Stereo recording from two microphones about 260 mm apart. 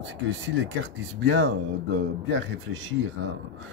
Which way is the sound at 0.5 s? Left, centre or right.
Right.